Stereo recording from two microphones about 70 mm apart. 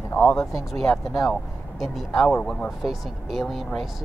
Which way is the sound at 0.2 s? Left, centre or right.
Centre.